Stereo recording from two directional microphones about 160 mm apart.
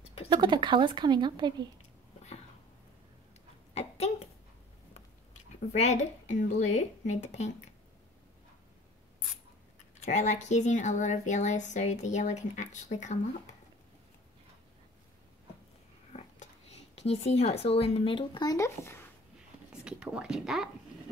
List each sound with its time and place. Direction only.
0.3 s a woman's voice: 30° right (ahead or behind)
4.9 s speech: 45° left (ahead or behind)
9.9 s speech: 45° left (ahead or behind)
16.1 s a sound: 45° left (ahead or behind)
16.9 s speech: 40° left (ahead or behind); by 19.0 s 15° left (ahead or behind)
19.7 s speech: 5° right (ahead or behind)